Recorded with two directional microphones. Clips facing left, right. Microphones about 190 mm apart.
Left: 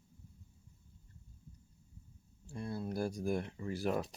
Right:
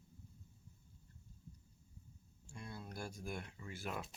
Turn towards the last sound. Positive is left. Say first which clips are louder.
# left 10 dB
turn(degrees=35)  # may be behind; listen again after turning